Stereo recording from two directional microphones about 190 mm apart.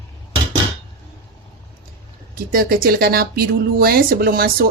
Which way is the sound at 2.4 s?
50° right (ahead or behind).